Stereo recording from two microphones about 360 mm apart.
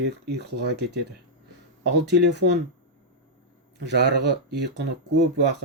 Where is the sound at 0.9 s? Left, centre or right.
Right.